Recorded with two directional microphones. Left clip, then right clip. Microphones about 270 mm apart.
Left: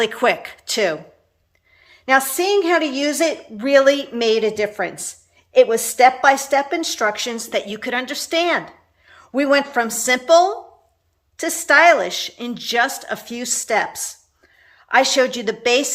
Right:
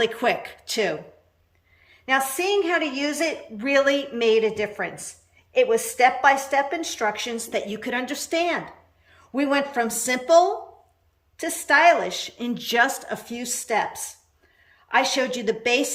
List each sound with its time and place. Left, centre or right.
0.0 s a woman's voice: centre